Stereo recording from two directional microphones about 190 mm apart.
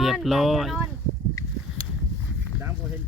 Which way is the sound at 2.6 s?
10° right (ahead or behind).